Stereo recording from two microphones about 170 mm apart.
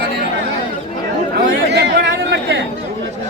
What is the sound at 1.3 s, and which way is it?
Chatter, 80° right.